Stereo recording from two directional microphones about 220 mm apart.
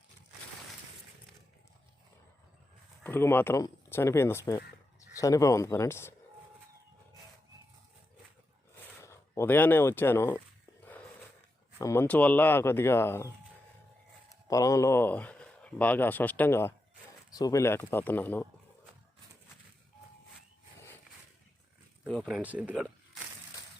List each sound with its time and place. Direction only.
3.0 s speech: 10° left (ahead or behind)
9.0 s speech: 10° left (ahead or behind)
11.8 s speech: 10° left (ahead or behind)
14.4 s speech: 15° left (ahead or behind)
22.0 s speech: centre (ahead or behind)